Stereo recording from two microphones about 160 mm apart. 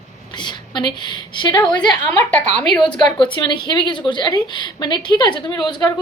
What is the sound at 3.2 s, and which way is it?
A woman's voice, 30° left (ahead or behind).